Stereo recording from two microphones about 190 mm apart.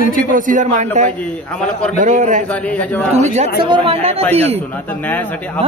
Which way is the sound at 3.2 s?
35° right (ahead or behind).